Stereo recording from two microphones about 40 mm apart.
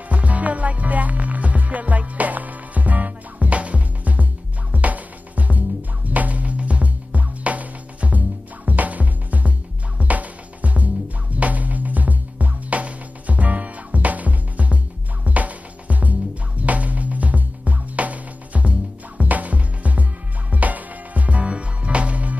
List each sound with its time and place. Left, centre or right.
0.1 s music: right